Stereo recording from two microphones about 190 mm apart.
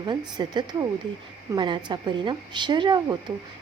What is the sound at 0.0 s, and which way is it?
A woman's voice, 25° right (ahead or behind).